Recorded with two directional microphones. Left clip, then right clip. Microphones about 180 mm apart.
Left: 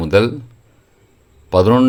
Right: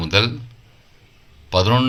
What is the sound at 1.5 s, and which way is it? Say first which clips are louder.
Speech: left 5 dB; 60° left (ahead or behind).